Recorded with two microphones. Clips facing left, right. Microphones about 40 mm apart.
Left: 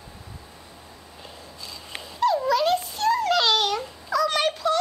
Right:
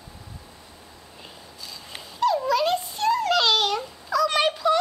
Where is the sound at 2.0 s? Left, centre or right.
Centre.